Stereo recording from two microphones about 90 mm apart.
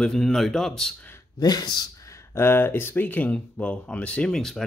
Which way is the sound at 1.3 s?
50° left (ahead or behind).